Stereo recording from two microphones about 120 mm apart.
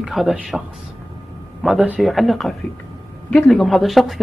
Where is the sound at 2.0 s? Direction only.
Centre (ahead or behind).